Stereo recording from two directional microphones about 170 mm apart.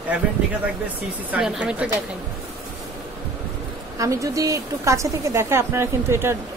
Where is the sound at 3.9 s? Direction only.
20° right (ahead or behind).